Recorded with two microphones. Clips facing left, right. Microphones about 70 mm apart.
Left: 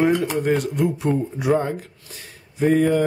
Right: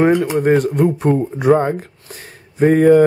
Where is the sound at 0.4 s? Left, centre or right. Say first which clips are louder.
Right 6 dB; right.